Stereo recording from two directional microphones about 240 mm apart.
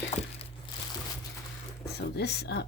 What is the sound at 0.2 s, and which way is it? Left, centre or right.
Crumpling, left.